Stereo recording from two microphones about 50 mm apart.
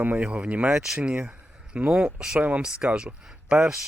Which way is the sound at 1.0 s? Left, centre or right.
Right.